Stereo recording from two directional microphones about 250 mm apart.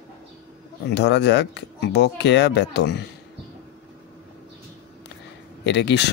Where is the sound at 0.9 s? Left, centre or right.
Left.